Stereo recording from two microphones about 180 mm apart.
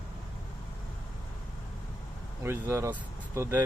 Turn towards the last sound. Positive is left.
turn(degrees=-15)  # may be behind; listen again after turning